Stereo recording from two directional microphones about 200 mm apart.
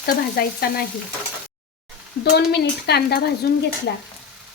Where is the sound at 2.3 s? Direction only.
55° left (ahead or behind).